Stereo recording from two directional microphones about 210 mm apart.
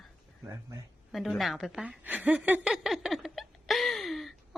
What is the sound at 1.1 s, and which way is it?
A woman's voice, centre (ahead or behind).